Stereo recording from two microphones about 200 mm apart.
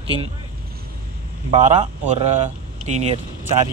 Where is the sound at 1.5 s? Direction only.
30° right (ahead or behind).